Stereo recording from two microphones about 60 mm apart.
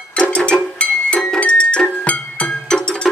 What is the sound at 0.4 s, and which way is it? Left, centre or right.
Music, centre.